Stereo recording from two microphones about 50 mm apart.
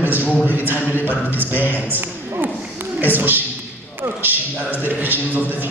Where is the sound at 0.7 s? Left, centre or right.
Right.